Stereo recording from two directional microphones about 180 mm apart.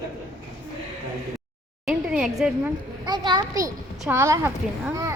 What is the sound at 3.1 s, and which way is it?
A child's voice, 25° right (ahead or behind).